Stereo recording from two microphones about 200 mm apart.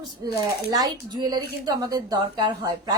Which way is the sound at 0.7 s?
20° right (ahead or behind).